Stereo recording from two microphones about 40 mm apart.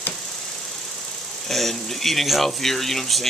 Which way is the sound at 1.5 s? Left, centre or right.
Centre.